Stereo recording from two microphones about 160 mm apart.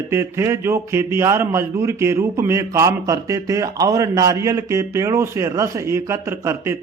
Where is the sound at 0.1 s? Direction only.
15° right (ahead or behind).